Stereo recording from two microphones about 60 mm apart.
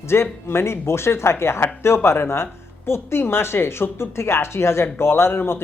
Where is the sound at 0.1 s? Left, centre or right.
Left.